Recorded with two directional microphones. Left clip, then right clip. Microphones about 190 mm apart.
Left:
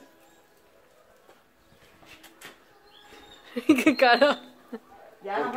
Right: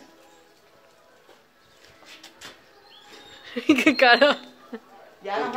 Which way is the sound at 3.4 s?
Centre (ahead or behind).